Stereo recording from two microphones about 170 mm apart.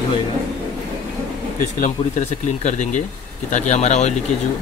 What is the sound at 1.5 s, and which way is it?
Speech, 50° left (ahead or behind).